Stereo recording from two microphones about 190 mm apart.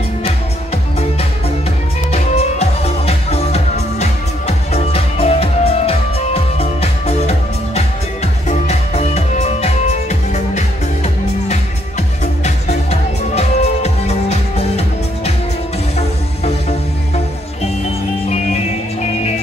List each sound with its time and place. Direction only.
2.1 s music: 35° left (ahead or behind)
12.4 s music: 35° left (ahead or behind)
16.4 s music: 35° left (ahead or behind)